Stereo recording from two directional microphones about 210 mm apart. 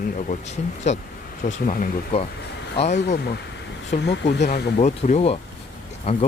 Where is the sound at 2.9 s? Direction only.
50° left (ahead or behind).